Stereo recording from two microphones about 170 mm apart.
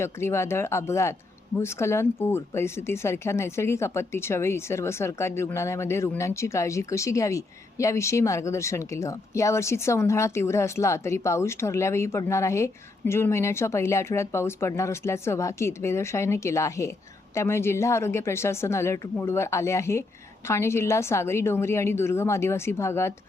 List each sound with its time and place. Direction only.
0.0 s speech: 15° left (ahead or behind)